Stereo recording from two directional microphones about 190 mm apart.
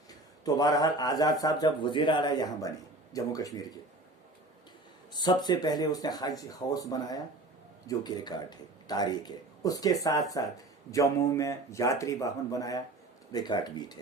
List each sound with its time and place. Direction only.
0.1 s a man's voice: 20° left (ahead or behind)
5.1 s a man's voice: 20° left (ahead or behind)